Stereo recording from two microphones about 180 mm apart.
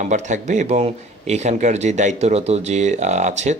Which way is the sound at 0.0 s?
40° right (ahead or behind).